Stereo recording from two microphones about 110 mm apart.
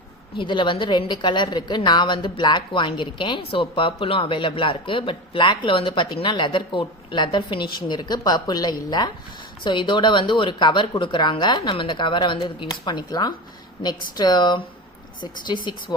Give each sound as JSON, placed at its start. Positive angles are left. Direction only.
{"t": 0.3, "sound": "a woman's voice", "side_deg": 45}